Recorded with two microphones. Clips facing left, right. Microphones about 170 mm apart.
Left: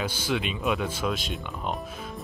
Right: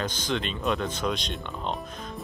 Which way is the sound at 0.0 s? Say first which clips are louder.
Left 1 dB; 10° left (ahead or behind).